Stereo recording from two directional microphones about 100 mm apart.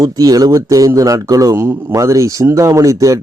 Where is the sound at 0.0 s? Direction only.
35° right (ahead or behind).